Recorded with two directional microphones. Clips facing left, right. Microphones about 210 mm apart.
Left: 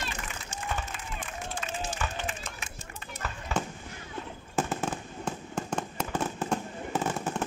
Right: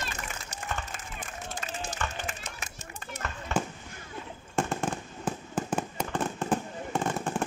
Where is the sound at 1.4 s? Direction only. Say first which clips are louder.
Left 1 dB; 40° right (ahead or behind).